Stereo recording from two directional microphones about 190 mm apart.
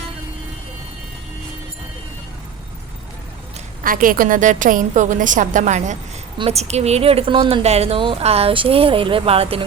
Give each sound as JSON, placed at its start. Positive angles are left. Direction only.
{"t": 3.8, "sound": "a woman's voice", "side_deg": -45}